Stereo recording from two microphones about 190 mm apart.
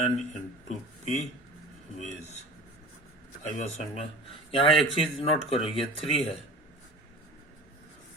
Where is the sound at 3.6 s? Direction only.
35° left (ahead or behind).